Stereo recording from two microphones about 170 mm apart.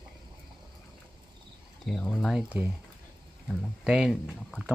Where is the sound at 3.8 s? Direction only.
5° right (ahead or behind).